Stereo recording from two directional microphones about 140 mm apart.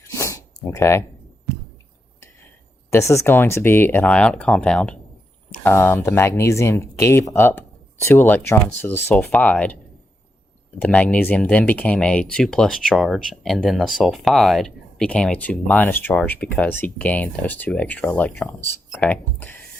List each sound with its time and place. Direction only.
0.1 s a sound: 20° left (ahead or behind)
2.9 s speech: 20° left (ahead or behind)
10.8 s speech: 10° left (ahead or behind)